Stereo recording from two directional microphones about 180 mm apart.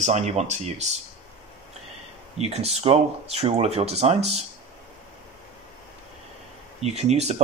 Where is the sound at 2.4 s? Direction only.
35° right (ahead or behind).